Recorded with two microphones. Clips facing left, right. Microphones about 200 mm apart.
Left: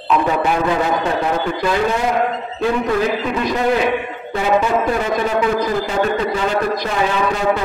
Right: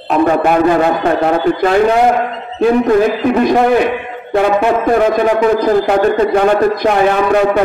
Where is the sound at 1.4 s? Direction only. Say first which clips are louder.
Right 7 dB; 50° right (ahead or behind).